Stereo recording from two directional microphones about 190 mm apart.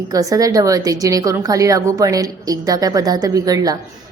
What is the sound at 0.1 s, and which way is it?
A woman's voice, 20° right (ahead or behind).